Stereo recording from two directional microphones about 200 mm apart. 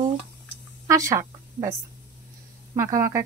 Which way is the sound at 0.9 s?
15° right (ahead or behind).